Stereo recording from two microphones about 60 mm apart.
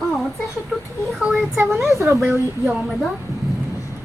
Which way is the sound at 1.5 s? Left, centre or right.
Right.